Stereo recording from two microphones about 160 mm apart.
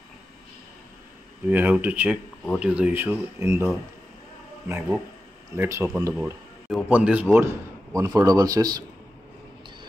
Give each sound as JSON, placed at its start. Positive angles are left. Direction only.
{"t": 1.5, "sound": "speech", "side_deg": -10}
{"t": 4.6, "sound": "a man's voice", "side_deg": -15}